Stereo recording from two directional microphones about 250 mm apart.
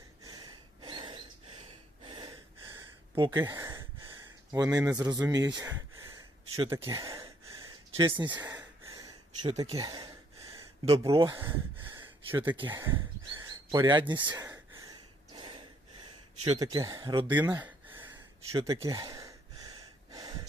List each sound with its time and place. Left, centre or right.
0.2 s gasp: centre
4.5 s speech: centre
6.8 s gasp: centre
10.8 s speech: centre
11.3 s gasp: centre
12.6 s a sound: centre
14.3 s gasp: centre
16.4 s speech: centre
17.3 s gasp: centre